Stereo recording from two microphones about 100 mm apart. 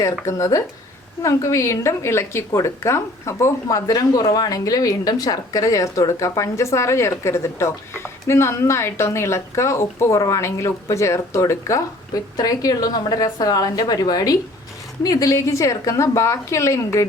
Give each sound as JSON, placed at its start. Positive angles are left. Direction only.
{"t": 0.0, "sound": "a woman's voice", "side_deg": 30}